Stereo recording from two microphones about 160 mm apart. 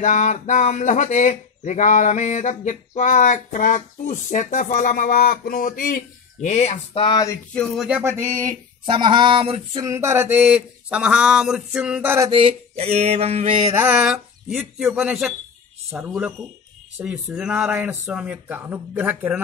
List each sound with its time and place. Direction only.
0.0 s speech: 50° left (ahead or behind); by 7.2 s 35° left (ahead or behind)
7.5 s speech: centre (ahead or behind)
8.0 s speech: 20° right (ahead or behind)
8.8 s mantra: 30° right (ahead or behind)
9.8 s speech: 15° right (ahead or behind)
12.3 s mantra: 35° right (ahead or behind)
13.7 s speech: 5° right (ahead or behind)